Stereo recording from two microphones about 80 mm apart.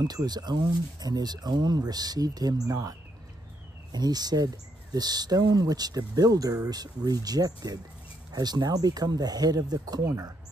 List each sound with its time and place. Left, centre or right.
0.0 s speech: right